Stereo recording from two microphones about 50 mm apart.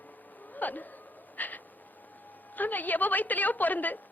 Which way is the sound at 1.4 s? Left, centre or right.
Left.